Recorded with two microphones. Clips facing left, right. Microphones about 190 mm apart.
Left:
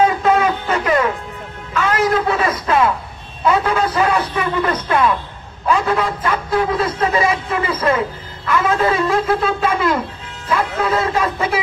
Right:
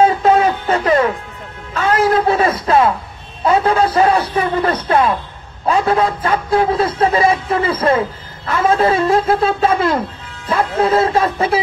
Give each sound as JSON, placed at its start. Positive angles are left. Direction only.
{"t": 0.0, "sound": "music", "side_deg": -35}
{"t": 3.4, "sound": "a man's voice", "side_deg": -35}